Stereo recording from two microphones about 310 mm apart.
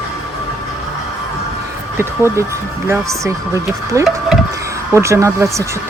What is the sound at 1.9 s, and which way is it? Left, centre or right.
Speech, centre.